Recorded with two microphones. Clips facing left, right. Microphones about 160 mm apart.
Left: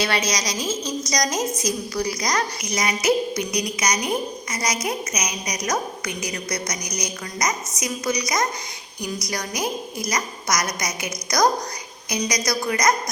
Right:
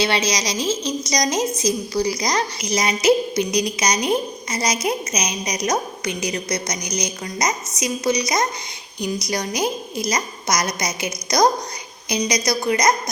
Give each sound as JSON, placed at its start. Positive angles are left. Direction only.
{"t": 0.3, "sound": "a woman's voice", "side_deg": -25}